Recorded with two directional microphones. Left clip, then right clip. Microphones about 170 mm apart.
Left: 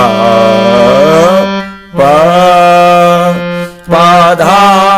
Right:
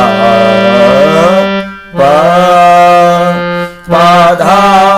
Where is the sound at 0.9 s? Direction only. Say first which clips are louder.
Left 1 dB; 30° left (ahead or behind).